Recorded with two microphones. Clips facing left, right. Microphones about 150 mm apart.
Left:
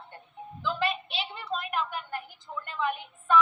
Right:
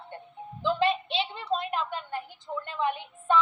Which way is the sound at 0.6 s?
25° right (ahead or behind).